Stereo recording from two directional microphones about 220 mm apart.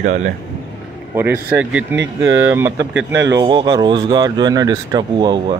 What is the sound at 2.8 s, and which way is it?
Speech, 55° right (ahead or behind).